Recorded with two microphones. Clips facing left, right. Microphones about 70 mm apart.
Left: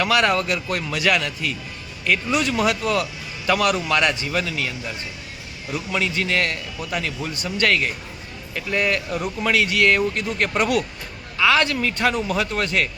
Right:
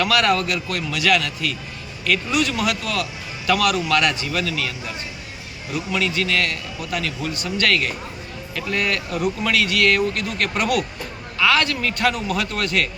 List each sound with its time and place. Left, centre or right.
0.0 s speech: centre
0.4 s a man's voice: left
5.9 s a man's voice: left